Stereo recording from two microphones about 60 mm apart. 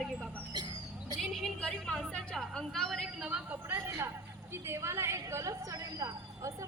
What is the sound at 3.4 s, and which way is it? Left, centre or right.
Speech, right.